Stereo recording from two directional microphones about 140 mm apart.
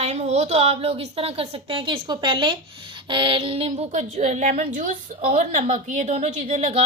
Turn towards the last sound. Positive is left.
turn(degrees=-45)  # may be behind; listen again after turning